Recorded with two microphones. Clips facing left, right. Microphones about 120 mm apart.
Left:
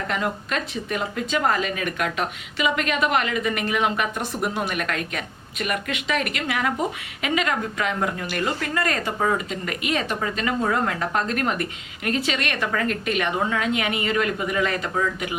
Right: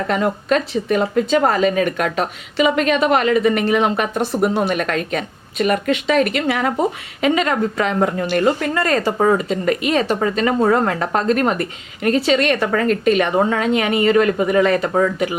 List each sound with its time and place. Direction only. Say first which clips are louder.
0.1 s speech: right 10 dB; 35° right (ahead or behind)